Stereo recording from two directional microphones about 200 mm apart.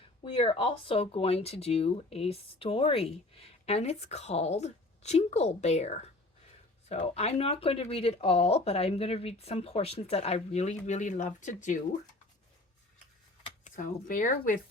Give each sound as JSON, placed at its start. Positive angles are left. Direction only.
{"t": 0.3, "sound": "speech", "side_deg": 25}
{"t": 13.7, "sound": "speech", "side_deg": 40}